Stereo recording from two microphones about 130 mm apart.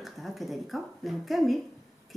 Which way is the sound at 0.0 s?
Centre (ahead or behind).